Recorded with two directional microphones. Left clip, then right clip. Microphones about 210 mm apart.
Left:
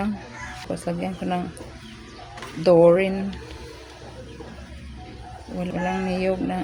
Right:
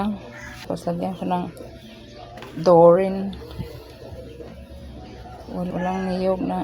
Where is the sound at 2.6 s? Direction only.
5° right (ahead or behind).